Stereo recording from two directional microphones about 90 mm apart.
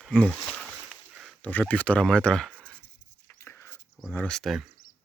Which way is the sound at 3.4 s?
25° left (ahead or behind).